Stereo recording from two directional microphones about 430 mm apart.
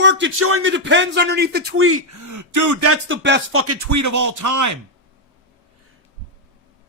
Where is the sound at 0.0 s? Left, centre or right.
Right.